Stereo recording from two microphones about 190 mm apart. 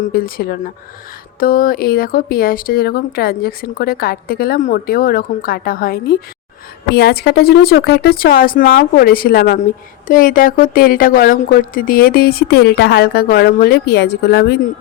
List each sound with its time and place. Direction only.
0.0 s speech: 50° left (ahead or behind)